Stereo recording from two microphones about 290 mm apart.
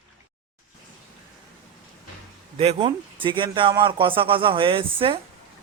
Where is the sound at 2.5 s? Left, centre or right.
Centre.